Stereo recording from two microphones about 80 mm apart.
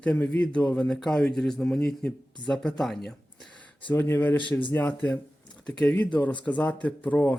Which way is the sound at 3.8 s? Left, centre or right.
Left.